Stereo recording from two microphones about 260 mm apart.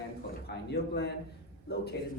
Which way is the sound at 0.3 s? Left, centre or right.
Left.